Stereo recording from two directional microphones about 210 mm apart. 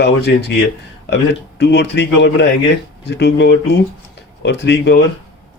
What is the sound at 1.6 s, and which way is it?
Speech, 55° left (ahead or behind).